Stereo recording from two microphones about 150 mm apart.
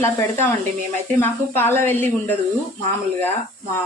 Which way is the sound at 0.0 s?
15° left (ahead or behind).